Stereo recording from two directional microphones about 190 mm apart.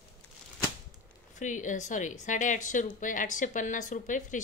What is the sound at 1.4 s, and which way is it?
A woman's voice, 40° left (ahead or behind).